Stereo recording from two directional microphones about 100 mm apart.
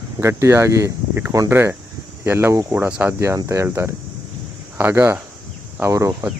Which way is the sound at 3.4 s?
30° right (ahead or behind).